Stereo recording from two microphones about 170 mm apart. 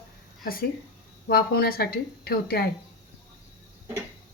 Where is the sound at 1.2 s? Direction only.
65° left (ahead or behind).